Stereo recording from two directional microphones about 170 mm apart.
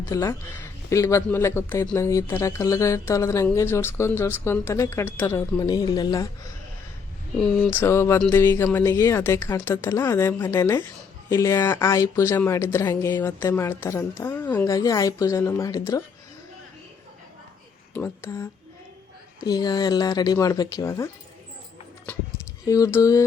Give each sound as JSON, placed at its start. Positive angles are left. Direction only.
{"t": 0.0, "sound": "a man's voice", "side_deg": 15}
{"t": 7.3, "sound": "a man's voice", "side_deg": 10}
{"t": 14.7, "sound": "speech", "side_deg": 20}
{"t": 17.9, "sound": "speech", "side_deg": 15}
{"t": 19.5, "sound": "speech", "side_deg": 25}
{"t": 22.6, "sound": "speech", "side_deg": 20}